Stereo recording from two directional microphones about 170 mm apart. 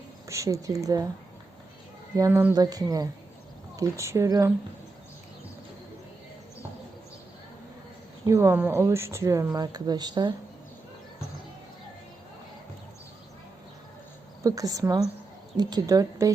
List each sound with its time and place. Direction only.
0.3 s speech: 20° right (ahead or behind)
2.1 s speech: 15° right (ahead or behind)
8.2 s speech: 15° right (ahead or behind)
14.4 s speech: 20° right (ahead or behind)